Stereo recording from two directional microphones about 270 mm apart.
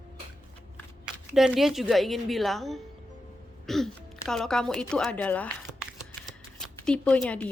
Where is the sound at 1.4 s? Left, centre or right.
Centre.